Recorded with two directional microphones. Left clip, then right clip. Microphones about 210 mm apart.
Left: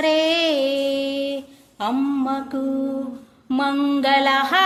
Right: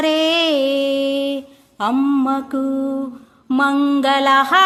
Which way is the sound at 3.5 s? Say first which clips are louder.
Right 4 dB; 25° right (ahead or behind).